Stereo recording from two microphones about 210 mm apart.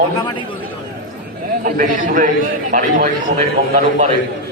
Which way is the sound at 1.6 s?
40° right (ahead or behind).